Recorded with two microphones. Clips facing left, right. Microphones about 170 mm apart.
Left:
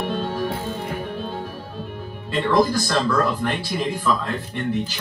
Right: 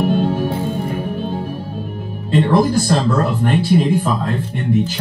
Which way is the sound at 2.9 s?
30° right (ahead or behind).